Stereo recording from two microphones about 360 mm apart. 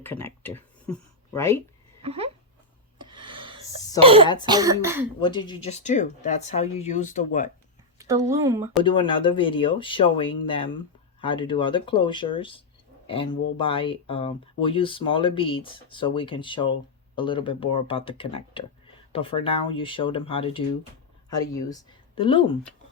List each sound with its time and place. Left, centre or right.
0.0 s speech: centre
2.0 s a sound: centre
3.1 s gasp: centre
4.0 s speech: centre
5.2 s speech: centre
7.9 s speech: centre
9.0 s speech: centre